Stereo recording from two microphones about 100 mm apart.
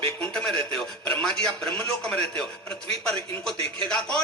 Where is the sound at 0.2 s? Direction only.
10° left (ahead or behind).